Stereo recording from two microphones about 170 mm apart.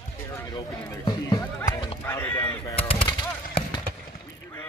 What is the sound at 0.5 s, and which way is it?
Run, 25° left (ahead or behind).